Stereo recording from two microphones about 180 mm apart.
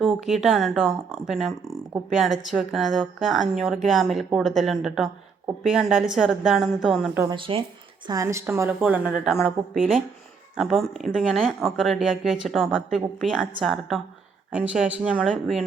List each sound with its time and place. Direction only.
0.0 s speech: centre (ahead or behind)
7.2 s a woman's voice: 25° right (ahead or behind); by 15.6 s 5° right (ahead or behind)